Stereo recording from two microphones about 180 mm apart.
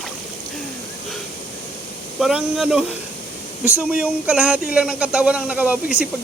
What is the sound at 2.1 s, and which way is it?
Speech, centre (ahead or behind).